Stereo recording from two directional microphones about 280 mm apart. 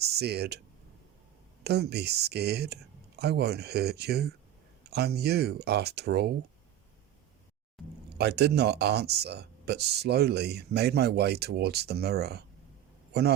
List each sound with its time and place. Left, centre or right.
0.0 s speech: right
1.6 s speech: right
8.2 s speech: right